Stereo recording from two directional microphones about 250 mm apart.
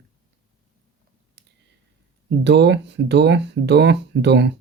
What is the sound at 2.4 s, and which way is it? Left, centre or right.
Speech, right.